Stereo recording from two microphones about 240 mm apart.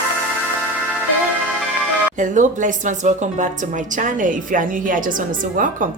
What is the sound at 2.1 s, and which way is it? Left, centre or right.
Music, right.